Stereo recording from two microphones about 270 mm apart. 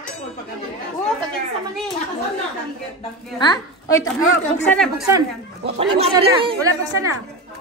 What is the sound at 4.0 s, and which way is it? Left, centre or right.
Speech, left.